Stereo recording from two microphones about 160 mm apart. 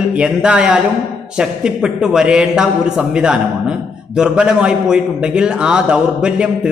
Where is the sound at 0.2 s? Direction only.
5° right (ahead or behind).